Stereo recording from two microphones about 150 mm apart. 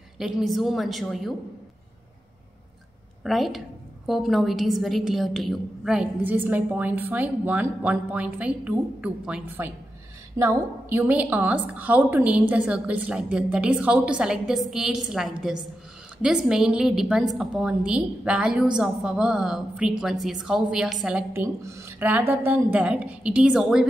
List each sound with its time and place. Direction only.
0.2 s a woman's voice: centre (ahead or behind)
3.3 s a woman's voice: centre (ahead or behind)